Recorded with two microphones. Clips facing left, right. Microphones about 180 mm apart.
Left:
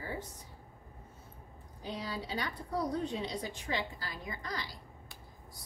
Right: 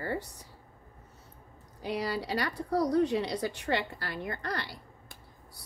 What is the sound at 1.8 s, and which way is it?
A woman's voice, 75° right (ahead or behind).